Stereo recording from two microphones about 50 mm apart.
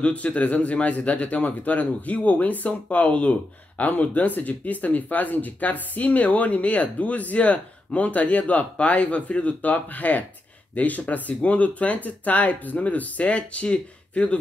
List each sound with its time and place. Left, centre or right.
0.0 s speech: left